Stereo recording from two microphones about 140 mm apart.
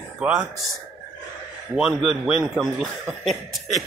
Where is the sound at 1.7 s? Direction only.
5° right (ahead or behind).